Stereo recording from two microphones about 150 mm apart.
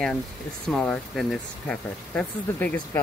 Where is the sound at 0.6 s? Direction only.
5° left (ahead or behind).